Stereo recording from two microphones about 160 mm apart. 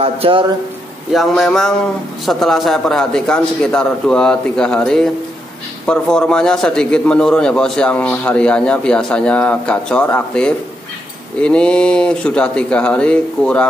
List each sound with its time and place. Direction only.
0.0 s speech: 35° right (ahead or behind)
1.1 s a man's voice: centre (ahead or behind)